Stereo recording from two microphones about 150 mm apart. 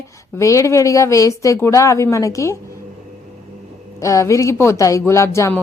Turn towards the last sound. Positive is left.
turn(degrees=20)  # may be behind; listen again after turning